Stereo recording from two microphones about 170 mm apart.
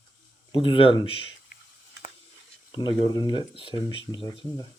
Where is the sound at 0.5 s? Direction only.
30° left (ahead or behind).